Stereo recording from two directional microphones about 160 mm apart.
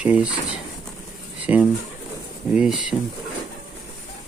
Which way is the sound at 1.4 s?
10° right (ahead or behind).